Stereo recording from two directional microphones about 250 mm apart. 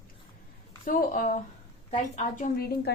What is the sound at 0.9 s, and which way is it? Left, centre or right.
A woman's voice, left.